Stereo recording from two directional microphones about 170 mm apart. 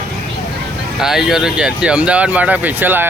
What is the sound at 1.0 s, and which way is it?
Speech, centre (ahead or behind).